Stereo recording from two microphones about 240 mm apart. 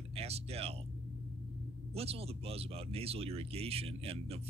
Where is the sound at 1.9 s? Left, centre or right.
Right.